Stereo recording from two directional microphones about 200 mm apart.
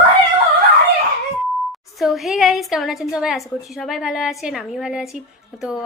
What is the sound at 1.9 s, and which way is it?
Speech, centre (ahead or behind).